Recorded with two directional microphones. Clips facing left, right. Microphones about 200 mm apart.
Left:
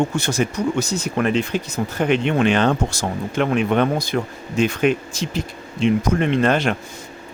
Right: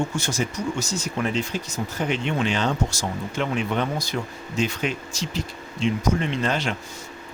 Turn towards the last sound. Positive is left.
turn(degrees=55)  # may be behind; listen again after turning